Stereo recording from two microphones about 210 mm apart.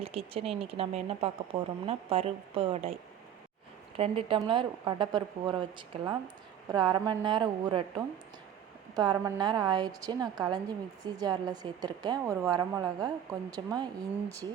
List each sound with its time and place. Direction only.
0.0 s a woman's voice: 25° right (ahead or behind)
3.9 s a woman's voice: 30° right (ahead or behind)